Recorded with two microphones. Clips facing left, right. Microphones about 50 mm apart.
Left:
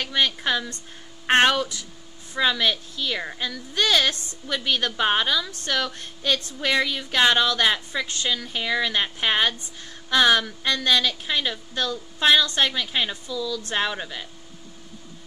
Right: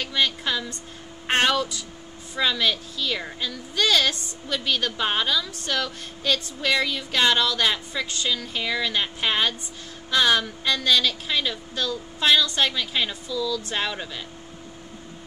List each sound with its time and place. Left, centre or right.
0.1 s a woman's voice: left